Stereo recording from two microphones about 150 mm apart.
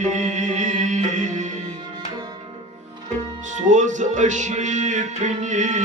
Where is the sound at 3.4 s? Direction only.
55° right (ahead or behind).